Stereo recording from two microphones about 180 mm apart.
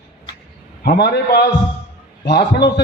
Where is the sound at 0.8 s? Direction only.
60° left (ahead or behind).